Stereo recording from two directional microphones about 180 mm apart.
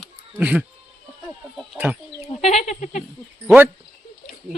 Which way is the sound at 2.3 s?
35° left (ahead or behind).